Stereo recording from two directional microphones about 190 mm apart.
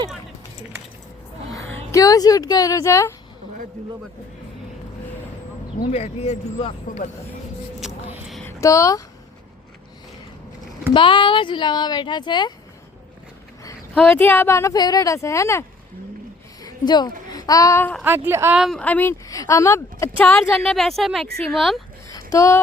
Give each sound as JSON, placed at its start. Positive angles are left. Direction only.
{"t": 1.5, "sound": "speech", "side_deg": 15}
{"t": 5.9, "sound": "speech", "side_deg": 35}
{"t": 7.8, "sound": "a sound", "side_deg": 0}
{"t": 8.4, "sound": "speech", "side_deg": 15}
{"t": 10.9, "sound": "speech", "side_deg": 25}
{"t": 13.9, "sound": "speech", "side_deg": 5}
{"t": 16.6, "sound": "a woman's voice", "side_deg": 20}
{"t": 18.0, "sound": "a woman's voice", "side_deg": -10}
{"t": 18.6, "sound": "speech", "side_deg": 5}
{"t": 22.1, "sound": "a sound", "side_deg": 15}